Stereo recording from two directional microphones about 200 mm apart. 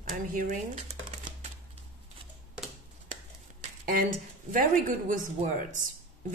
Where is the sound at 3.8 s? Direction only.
45° right (ahead or behind).